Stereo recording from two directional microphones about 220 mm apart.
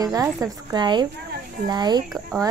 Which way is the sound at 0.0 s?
15° right (ahead or behind).